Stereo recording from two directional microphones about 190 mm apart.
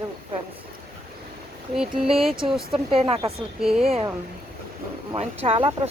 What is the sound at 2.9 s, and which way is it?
Speech, 30° right (ahead or behind).